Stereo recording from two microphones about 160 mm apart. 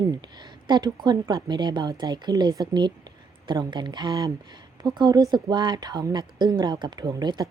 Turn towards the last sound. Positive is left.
turn(degrees=-25)  # may be behind; listen again after turning